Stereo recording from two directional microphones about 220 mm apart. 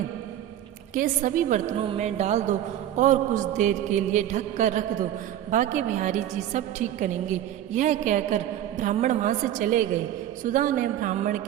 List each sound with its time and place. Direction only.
0.9 s a man's voice: 35° right (ahead or behind)